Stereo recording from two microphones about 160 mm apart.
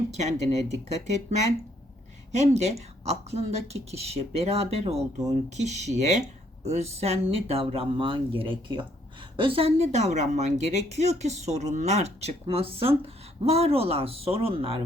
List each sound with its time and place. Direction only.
0.1 s a woman's voice: 45° right (ahead or behind)